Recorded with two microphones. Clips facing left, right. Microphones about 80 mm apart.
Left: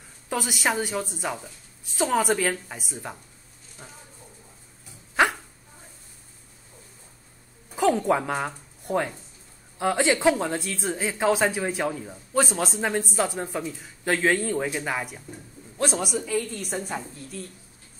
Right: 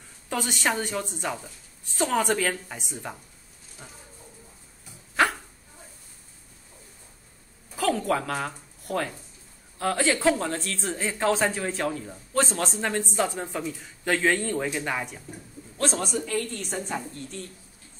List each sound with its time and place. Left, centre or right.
0.3 s a woman's voice: centre
5.2 s dog: centre
7.7 s a woman's voice: left